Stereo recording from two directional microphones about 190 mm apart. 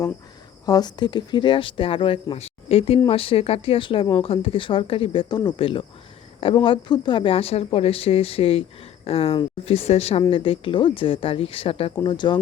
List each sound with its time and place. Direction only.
0.6 s a woman's voice: 20° left (ahead or behind)